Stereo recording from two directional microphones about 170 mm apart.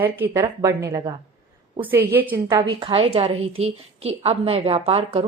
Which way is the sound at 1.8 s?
10° right (ahead or behind).